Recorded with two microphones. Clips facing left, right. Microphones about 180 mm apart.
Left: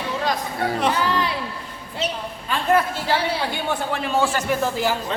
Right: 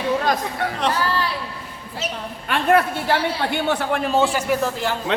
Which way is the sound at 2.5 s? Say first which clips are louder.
Right 2 dB; 65° right (ahead or behind).